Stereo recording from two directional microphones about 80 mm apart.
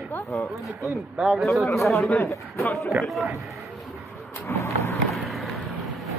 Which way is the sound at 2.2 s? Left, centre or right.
Left.